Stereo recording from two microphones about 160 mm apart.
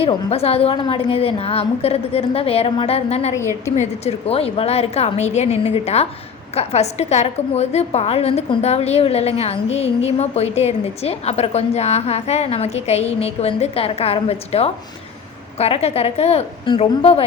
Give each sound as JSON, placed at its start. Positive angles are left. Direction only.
{"t": 0.0, "sound": "a woman's voice", "side_deg": 40}